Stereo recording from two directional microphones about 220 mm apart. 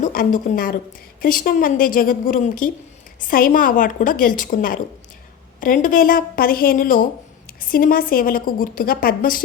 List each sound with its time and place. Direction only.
0.0 s a woman's voice: 40° left (ahead or behind)